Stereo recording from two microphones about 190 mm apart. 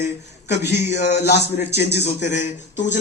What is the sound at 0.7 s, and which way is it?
A man's voice, 60° left (ahead or behind).